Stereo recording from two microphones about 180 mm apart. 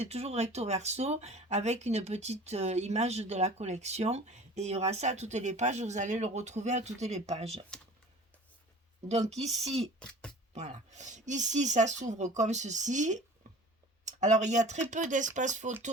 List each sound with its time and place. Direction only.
0.0 s speech: 35° right (ahead or behind)
10.0 s speech: 5° left (ahead or behind)
10.5 s speech: 40° right (ahead or behind)